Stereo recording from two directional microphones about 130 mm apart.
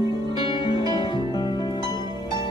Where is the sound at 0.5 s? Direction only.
35° left (ahead or behind).